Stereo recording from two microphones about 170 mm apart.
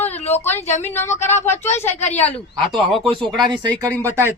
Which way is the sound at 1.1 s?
45° left (ahead or behind).